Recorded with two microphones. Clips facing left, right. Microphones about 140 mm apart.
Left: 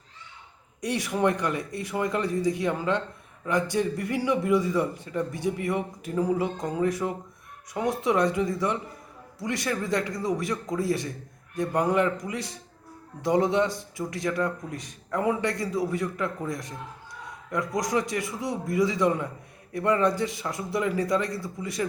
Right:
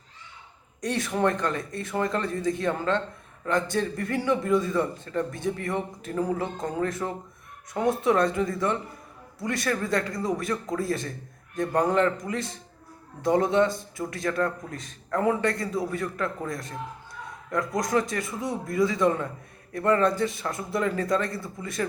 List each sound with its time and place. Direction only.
0.8 s a man's voice: 10° left (ahead or behind)